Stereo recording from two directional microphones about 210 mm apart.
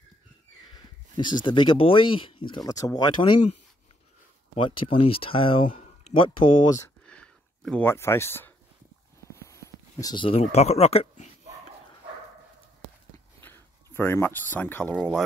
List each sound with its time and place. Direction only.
0.7 s speech: 20° left (ahead or behind)
4.6 s speech: 25° left (ahead or behind)
7.1 s a sound: 5° left (ahead or behind)
9.5 s speech: 15° left (ahead or behind)
13.4 s a sound: 10° left (ahead or behind)
13.9 s speech: 10° left (ahead or behind)